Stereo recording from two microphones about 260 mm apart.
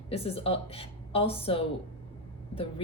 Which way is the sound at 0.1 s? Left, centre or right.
Left.